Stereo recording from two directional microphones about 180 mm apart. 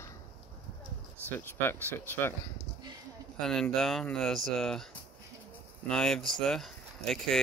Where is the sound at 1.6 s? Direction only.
10° left (ahead or behind).